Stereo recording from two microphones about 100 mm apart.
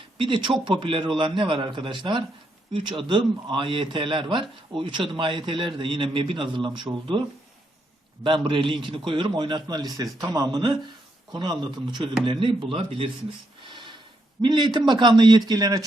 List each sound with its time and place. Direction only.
0.2 s a man's voice: 55° right (ahead or behind)
8.2 s a man's voice: 55° right (ahead or behind)
13.7 s snort: 55° right (ahead or behind)
14.4 s a man's voice: 50° right (ahead or behind)